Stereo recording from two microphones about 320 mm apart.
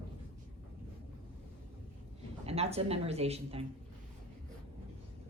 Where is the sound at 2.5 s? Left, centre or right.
Centre.